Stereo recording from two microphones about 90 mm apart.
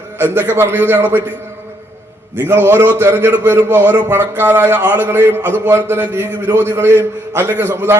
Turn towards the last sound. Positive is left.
turn(degrees=-25)  # may be behind; listen again after turning